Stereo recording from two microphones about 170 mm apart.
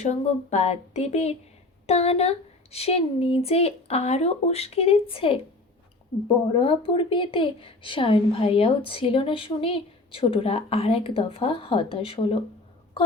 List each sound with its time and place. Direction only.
0.0 s a woman's voice: 40° left (ahead or behind)
6.5 s a woman's voice: 30° left (ahead or behind)